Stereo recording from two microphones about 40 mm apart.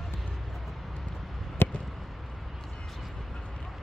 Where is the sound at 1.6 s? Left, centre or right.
Left.